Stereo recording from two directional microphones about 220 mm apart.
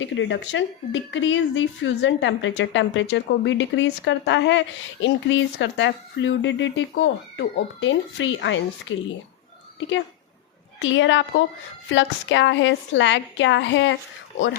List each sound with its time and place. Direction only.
0.0 s speech: 55° left (ahead or behind)
10.8 s speech: 60° left (ahead or behind)